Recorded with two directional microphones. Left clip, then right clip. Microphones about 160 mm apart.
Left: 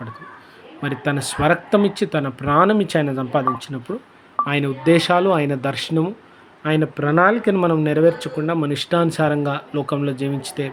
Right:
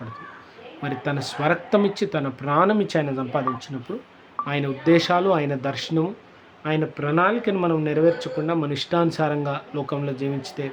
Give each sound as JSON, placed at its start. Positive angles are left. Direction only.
{"t": 0.8, "sound": "speech", "side_deg": 25}
{"t": 4.4, "sound": "speech", "side_deg": 25}